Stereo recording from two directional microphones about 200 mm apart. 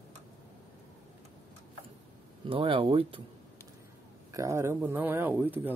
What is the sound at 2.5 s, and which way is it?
Speech, 30° right (ahead or behind).